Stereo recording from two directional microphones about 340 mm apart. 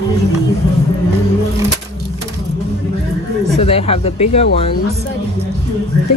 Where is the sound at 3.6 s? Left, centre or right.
Centre.